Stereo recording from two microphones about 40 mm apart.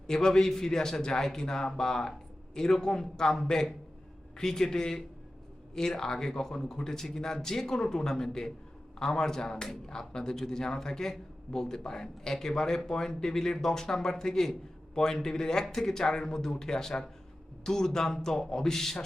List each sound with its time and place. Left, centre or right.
0.1 s speech: centre